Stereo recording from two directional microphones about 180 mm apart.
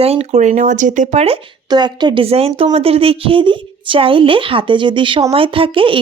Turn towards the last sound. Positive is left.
turn(degrees=-30)  # may be behind; listen again after turning